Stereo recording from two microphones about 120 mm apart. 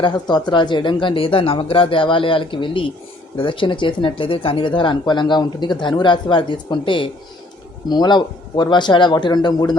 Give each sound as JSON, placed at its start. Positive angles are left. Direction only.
{"t": 0.0, "sound": "speech", "side_deg": 35}